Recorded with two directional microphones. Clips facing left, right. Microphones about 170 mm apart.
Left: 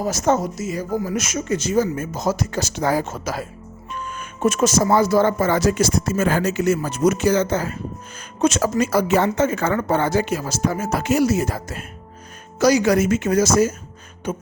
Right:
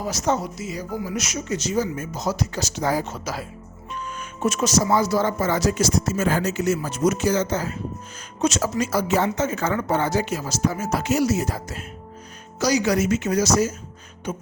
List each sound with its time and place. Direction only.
0.0 s speech: 50° left (ahead or behind)